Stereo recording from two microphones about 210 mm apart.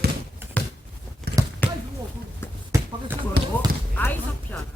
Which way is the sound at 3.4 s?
50° right (ahead or behind).